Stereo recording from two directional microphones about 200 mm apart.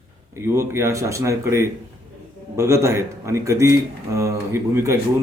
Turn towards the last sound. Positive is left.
turn(degrees=-15)  # may be behind; listen again after turning